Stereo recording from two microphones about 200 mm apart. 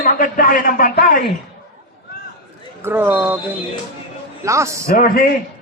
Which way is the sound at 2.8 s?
10° right (ahead or behind).